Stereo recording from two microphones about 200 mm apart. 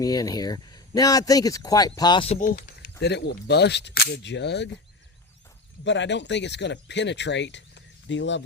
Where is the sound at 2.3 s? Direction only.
45° left (ahead or behind); by 4.6 s 60° left (ahead or behind).